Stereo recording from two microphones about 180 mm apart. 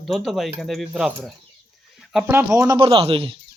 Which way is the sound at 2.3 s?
15° right (ahead or behind).